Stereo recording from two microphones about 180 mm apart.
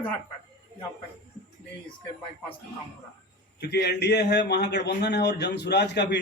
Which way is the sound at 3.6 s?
65° left (ahead or behind).